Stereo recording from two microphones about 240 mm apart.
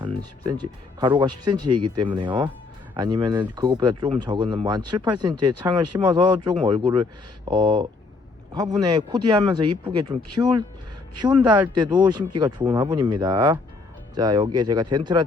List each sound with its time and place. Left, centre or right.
0.0 s speech: centre
11.7 s speech: centre